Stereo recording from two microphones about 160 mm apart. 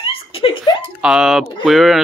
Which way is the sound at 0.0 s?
35° left (ahead or behind).